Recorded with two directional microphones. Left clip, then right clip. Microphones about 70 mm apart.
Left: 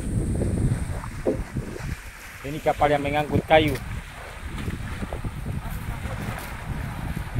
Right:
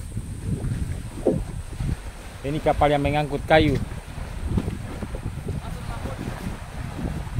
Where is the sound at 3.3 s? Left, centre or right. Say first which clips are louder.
Even; right.